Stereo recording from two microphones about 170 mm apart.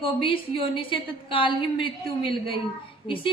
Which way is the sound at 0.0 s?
30° left (ahead or behind).